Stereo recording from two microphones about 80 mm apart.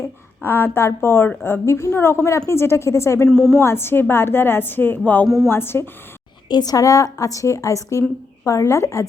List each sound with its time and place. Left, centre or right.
0.0 s a woman's voice: left
3.2 s a woman's voice: centre
3.6 s a woman's voice: left
6.5 s a woman's voice: left